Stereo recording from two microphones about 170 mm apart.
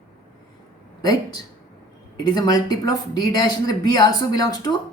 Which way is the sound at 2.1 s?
25° left (ahead or behind).